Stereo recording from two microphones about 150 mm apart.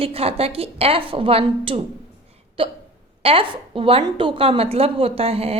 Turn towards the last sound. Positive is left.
turn(degrees=-40)  # may be behind; listen again after turning